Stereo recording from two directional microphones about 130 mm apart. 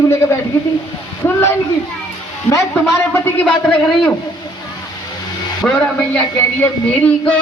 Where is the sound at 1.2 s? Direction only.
20° left (ahead or behind).